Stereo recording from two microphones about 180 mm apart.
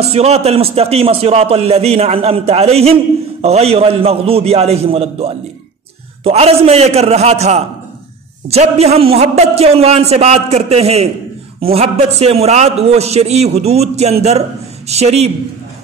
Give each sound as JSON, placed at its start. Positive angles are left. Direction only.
{"t": 0.0, "sound": "a man's voice", "side_deg": -35}